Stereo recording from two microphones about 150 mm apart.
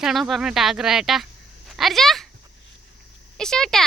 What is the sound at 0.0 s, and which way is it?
A woman's voice, centre (ahead or behind).